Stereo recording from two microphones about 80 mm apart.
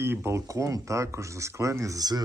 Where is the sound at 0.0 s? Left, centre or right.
Right.